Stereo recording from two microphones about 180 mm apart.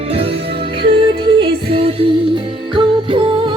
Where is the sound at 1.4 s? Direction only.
30° right (ahead or behind).